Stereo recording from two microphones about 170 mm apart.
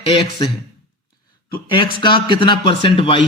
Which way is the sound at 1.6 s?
30° left (ahead or behind).